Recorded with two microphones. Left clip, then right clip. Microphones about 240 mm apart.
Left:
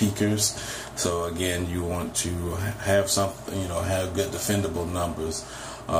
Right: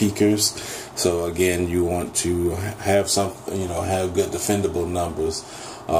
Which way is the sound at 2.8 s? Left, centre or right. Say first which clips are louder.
Right 3 dB; centre.